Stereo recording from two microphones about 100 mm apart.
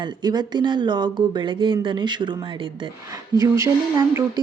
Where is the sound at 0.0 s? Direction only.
45° right (ahead or behind).